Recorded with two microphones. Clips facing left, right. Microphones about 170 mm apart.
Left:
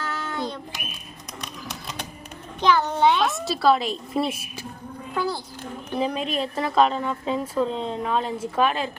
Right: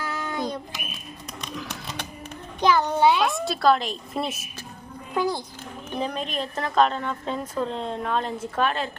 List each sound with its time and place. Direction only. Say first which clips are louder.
0.0 s a sound: even; 15° right (ahead or behind)
2.6 s speech: even; 10° right (ahead or behind); by 4.4 s 10° left (ahead or behind)
5.1 s a child's voice: right 2 dB; 15° right (ahead or behind)
6.0 s speech: left 3 dB; 5° left (ahead or behind)